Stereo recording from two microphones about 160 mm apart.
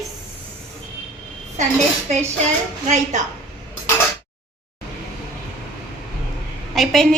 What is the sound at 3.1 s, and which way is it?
Speech, 50° right (ahead or behind).